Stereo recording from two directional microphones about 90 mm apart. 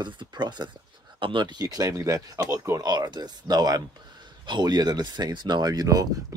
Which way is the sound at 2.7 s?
50° right (ahead or behind).